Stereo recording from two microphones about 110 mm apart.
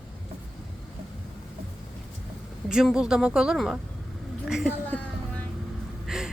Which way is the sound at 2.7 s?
5° right (ahead or behind).